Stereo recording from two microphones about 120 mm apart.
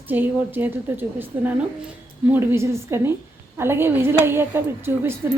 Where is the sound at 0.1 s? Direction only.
15° right (ahead or behind).